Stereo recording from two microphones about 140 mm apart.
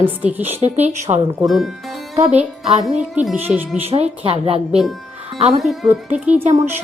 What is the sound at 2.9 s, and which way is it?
Speech, 55° right (ahead or behind).